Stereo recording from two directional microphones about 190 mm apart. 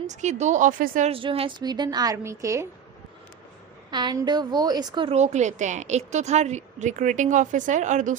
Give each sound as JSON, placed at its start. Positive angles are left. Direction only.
{"t": 0.1, "sound": "a woman's voice", "side_deg": -40}
{"t": 1.1, "sound": "a woman's voice", "side_deg": -30}
{"t": 3.9, "sound": "a woman's voice", "side_deg": -20}